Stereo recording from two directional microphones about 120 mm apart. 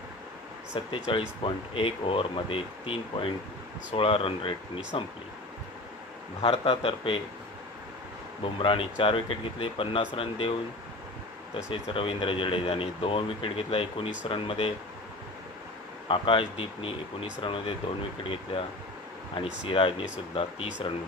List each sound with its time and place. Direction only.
0.7 s speech: 45° left (ahead or behind)
6.4 s speech: 50° left (ahead or behind)
8.5 s speech: 45° left (ahead or behind)
11.5 s speech: 50° left (ahead or behind)
16.1 s speech: 45° left (ahead or behind)
19.7 s speech: 50° left (ahead or behind)